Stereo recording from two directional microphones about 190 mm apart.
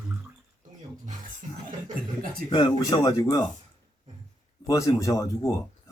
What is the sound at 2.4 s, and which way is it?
Speech, 25° left (ahead or behind).